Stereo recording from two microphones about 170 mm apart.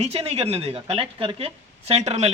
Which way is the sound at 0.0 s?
35° right (ahead or behind).